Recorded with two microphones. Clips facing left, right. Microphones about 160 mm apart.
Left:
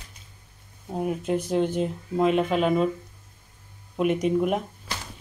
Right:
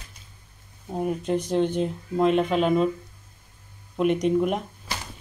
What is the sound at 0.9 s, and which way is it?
Speech, 5° left (ahead or behind).